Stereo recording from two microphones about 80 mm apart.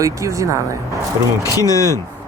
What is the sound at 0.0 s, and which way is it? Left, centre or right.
Speech, right.